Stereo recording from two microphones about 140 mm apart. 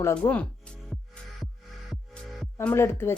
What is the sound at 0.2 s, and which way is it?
Speech, 10° left (ahead or behind).